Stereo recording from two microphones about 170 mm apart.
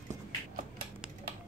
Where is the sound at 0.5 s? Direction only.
60° right (ahead or behind).